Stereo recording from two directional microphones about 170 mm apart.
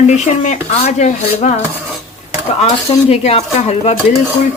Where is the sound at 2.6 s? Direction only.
40° left (ahead or behind).